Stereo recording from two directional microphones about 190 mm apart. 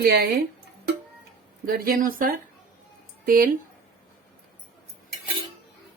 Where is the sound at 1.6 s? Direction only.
50° right (ahead or behind).